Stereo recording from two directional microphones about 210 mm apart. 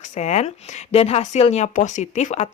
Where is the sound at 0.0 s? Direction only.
35° left (ahead or behind).